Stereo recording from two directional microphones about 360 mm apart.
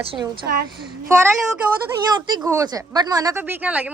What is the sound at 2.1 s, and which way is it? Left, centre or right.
Speech, centre.